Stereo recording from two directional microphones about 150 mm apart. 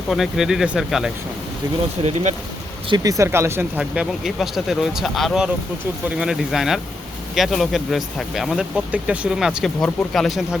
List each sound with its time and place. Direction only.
0.1 s speech: centre (ahead or behind)
2.0 s speech: 50° right (ahead or behind)
2.9 s speech: 25° right (ahead or behind); by 10.6 s centre (ahead or behind)